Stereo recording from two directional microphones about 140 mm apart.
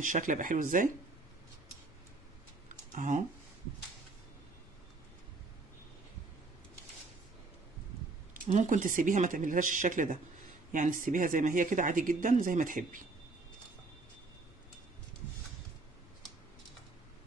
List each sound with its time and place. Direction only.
0.0 s speech: 70° right (ahead or behind)
2.9 s speech: 65° right (ahead or behind)
8.5 s speech: 60° right (ahead or behind)